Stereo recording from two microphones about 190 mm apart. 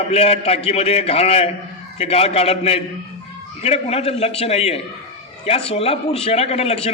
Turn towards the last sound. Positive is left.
turn(degrees=35)  # may be behind; listen again after turning